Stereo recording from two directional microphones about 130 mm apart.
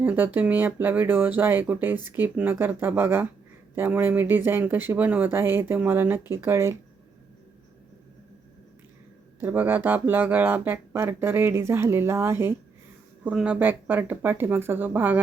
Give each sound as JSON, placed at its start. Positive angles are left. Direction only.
{"t": 0.0, "sound": "speech", "side_deg": -15}
{"t": 9.4, "sound": "speech", "side_deg": -15}